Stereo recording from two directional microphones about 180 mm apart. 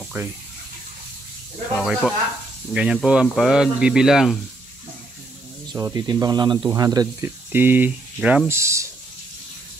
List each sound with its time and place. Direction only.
0.0 s water: 10° right (ahead or behind)
1.8 s speech: centre (ahead or behind)
5.7 s speech: 20° right (ahead or behind)